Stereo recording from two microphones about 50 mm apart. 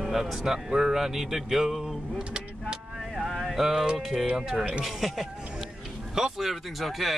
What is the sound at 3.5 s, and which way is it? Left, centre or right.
Music, centre.